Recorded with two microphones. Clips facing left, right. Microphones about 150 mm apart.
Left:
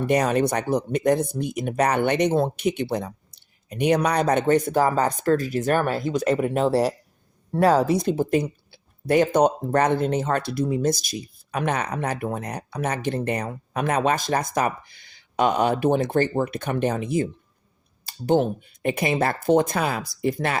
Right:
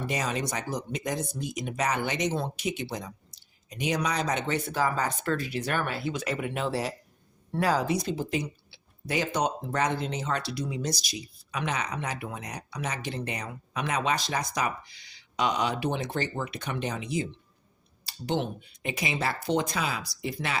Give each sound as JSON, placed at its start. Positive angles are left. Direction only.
{"t": 0.0, "sound": "speech", "side_deg": 60}
{"t": 7.9, "sound": "speech", "side_deg": 50}